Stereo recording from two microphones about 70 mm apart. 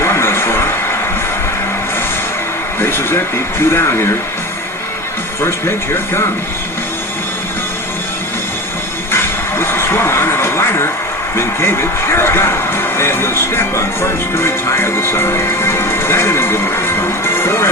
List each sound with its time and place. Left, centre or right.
0.0 s a sound: left
2.8 s a sound: left
3.6 s speech: left
5.4 s speech: left
9.1 s vehicle: left
11.3 s speech: left